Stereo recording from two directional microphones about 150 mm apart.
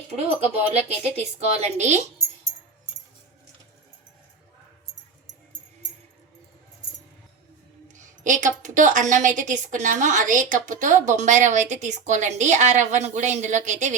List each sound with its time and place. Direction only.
0.2 s a woman's voice: 45° right (ahead or behind)
8.2 s a woman's voice: 60° right (ahead or behind)